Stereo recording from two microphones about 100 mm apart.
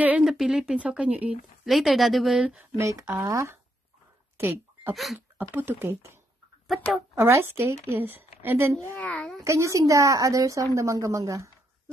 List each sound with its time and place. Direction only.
0.2 s speech: 5° right (ahead or behind)
1.6 s speech: centre (ahead or behind)
2.4 s speech: 15° right (ahead or behind)
2.8 s a woman's voice: 30° right (ahead or behind)
4.4 s a sound: 25° right (ahead or behind)
4.9 s speech: centre (ahead or behind)
5.5 s a woman's voice: 20° right (ahead or behind)
7.2 s a woman's voice: 25° right (ahead or behind)
8.9 s a child's voice: 10° left (ahead or behind)
9.4 s a woman's voice: 30° right (ahead or behind)